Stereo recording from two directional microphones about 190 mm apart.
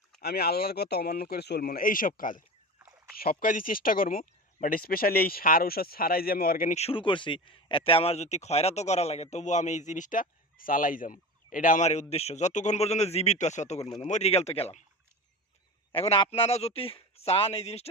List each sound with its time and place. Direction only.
0.2 s speech: 55° left (ahead or behind)
2.7 s a sound: 10° right (ahead or behind)
3.2 s a man's voice: 50° left (ahead or behind); by 14.8 s 35° left (ahead or behind)
15.9 s a man's voice: 30° left (ahead or behind)